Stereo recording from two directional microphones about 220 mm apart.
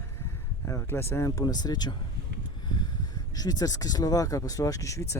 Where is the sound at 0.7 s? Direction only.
10° left (ahead or behind).